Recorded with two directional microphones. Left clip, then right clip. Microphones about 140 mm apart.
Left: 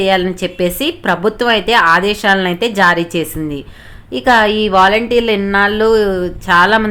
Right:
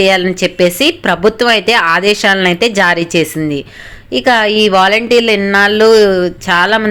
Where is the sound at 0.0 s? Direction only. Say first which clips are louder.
Right 3 dB; 20° right (ahead or behind).